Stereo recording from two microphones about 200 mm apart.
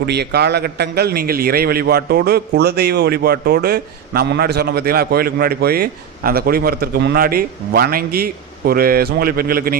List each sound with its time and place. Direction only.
0.0 s a man's voice: 55° right (ahead or behind)